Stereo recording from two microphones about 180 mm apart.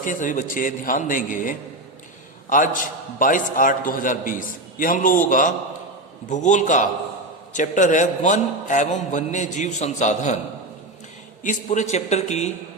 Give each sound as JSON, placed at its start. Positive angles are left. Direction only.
{"t": 0.0, "sound": "a man's voice", "side_deg": 45}
{"t": 11.4, "sound": "a man's voice", "side_deg": 40}